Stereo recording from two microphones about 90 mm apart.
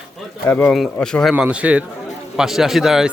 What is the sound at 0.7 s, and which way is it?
Speech, 5° left (ahead or behind).